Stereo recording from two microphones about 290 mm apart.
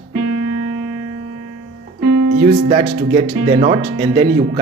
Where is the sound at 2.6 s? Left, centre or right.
Right.